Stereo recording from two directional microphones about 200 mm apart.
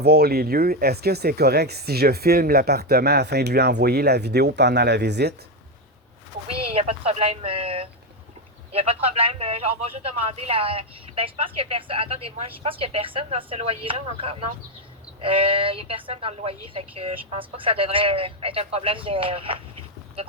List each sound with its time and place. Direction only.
0.0 s speech: 50° right (ahead or behind)
6.6 s speech: 30° right (ahead or behind)